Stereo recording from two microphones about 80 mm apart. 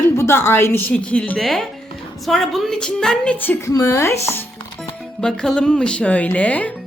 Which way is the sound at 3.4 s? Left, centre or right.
Left.